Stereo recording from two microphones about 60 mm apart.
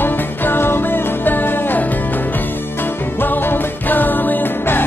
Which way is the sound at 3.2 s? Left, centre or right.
Left.